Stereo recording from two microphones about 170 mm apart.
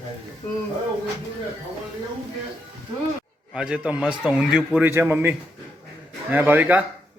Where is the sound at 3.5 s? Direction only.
5° right (ahead or behind).